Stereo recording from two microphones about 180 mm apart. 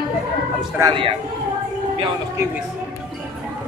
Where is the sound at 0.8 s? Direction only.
25° right (ahead or behind).